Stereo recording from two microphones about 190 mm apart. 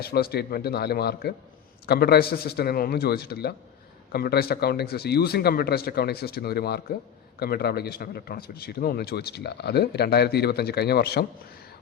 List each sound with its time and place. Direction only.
0.0 s speech: 55° left (ahead or behind)